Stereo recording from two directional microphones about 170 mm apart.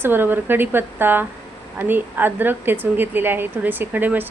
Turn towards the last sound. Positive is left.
turn(degrees=-10)  # may be behind; listen again after turning